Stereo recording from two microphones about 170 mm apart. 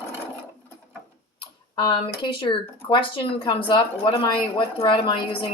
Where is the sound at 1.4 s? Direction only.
30° left (ahead or behind).